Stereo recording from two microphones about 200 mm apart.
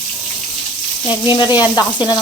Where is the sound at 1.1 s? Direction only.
20° left (ahead or behind).